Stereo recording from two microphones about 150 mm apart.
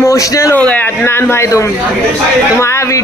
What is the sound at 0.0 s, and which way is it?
Speech, 20° left (ahead or behind).